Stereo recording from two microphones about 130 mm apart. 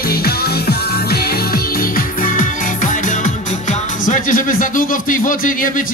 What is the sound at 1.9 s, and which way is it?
Music, 90° left.